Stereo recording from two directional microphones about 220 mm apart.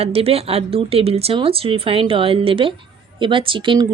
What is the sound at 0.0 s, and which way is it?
A woman's voice, 25° right (ahead or behind).